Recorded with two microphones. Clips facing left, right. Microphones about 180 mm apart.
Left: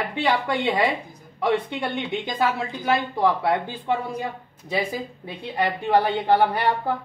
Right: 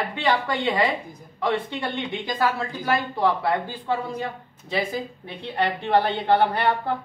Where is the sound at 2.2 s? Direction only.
20° left (ahead or behind).